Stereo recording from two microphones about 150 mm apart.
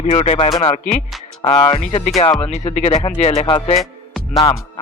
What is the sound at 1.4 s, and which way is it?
Music, 35° left (ahead or behind).